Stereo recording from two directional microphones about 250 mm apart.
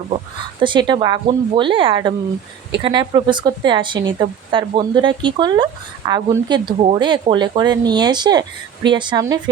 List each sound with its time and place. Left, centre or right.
0.6 s a woman's voice: centre